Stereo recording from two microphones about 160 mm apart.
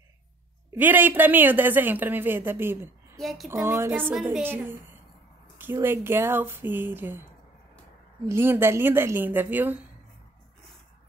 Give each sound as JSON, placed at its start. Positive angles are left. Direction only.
{"t": 0.7, "sound": "speech", "side_deg": -10}
{"t": 3.2, "sound": "speech", "side_deg": 0}
{"t": 3.4, "sound": "speech", "side_deg": -15}
{"t": 8.3, "sound": "speech", "side_deg": -15}